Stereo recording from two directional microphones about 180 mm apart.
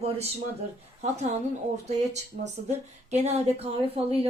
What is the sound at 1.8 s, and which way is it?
A woman's voice, 40° right (ahead or behind).